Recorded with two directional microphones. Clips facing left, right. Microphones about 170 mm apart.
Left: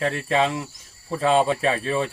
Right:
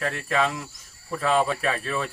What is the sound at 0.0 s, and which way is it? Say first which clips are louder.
Speech: left 3 dB; 30° left (ahead or behind).